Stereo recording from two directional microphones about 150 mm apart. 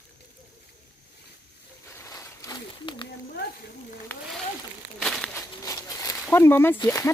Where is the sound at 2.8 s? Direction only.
35° left (ahead or behind).